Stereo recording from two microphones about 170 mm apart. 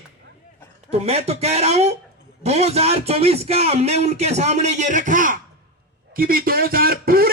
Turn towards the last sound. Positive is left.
turn(degrees=-60)  # may be behind; listen again after turning